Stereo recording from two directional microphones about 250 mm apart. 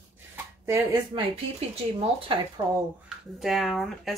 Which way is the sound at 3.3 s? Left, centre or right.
Centre.